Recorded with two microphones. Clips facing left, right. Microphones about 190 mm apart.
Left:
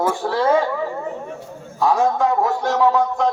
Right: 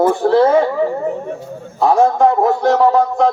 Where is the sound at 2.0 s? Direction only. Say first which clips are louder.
Right 8 dB; 60° right (ahead or behind).